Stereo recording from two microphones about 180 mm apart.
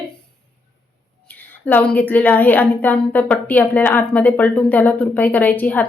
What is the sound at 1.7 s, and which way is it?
A woman's voice, 10° left (ahead or behind).